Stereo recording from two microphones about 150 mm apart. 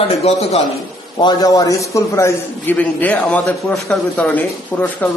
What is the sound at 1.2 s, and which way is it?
A man's voice, 25° left (ahead or behind).